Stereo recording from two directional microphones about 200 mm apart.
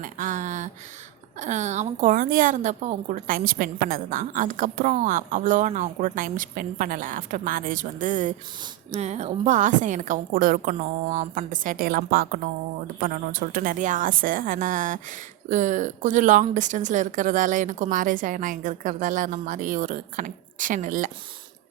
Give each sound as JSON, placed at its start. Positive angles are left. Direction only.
{"t": 0.0, "sound": "a sound", "side_deg": -40}
{"t": 1.4, "sound": "a woman's voice", "side_deg": -35}
{"t": 13.5, "sound": "a woman's voice", "side_deg": -45}